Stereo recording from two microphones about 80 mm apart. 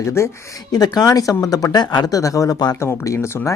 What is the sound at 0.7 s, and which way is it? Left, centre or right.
Speech, left.